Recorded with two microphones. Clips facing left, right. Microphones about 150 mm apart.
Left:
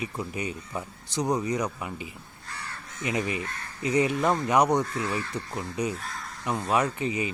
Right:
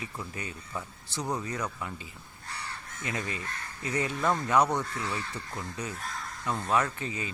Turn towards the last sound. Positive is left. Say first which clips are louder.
# left 5 dB
turn(degrees=15)  # may be behind; listen again after turning